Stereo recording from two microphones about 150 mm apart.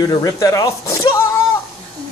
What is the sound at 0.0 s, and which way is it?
Speech, 25° left (ahead or behind).